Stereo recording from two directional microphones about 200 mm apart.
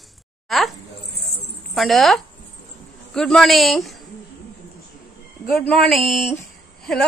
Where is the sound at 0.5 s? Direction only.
Centre (ahead or behind).